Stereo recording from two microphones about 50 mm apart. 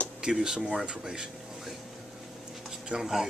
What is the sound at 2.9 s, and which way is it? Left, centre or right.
Speech, centre.